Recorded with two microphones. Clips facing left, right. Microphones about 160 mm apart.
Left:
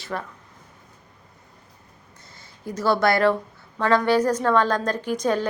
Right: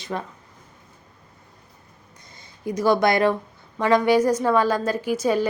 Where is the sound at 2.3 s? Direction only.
15° right (ahead or behind).